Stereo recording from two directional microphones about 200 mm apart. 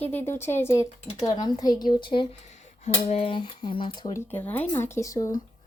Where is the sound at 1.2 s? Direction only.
20° left (ahead or behind).